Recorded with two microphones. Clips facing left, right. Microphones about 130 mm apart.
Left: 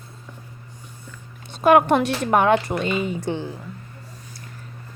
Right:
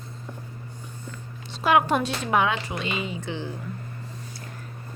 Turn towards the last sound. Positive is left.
turn(degrees=50)  # may be behind; listen again after turning